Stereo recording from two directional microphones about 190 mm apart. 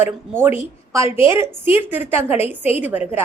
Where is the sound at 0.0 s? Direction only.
10° right (ahead or behind).